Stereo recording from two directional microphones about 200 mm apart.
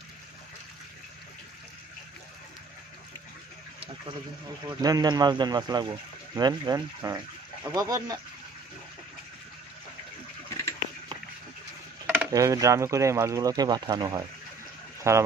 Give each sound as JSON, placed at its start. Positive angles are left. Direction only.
{"t": 4.6, "sound": "speech", "side_deg": -20}
{"t": 12.1, "sound": "speech", "side_deg": -15}